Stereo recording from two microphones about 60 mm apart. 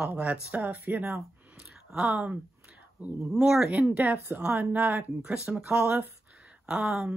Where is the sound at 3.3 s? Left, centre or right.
Centre.